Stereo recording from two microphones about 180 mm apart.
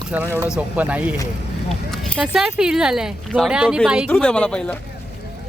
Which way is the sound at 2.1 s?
5° right (ahead or behind).